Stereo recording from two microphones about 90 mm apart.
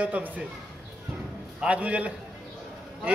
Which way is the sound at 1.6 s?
15° right (ahead or behind).